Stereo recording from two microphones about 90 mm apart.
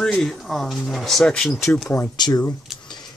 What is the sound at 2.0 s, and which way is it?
Speech, 50° left (ahead or behind).